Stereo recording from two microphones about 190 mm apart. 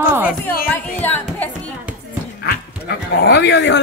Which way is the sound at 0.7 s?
10° left (ahead or behind).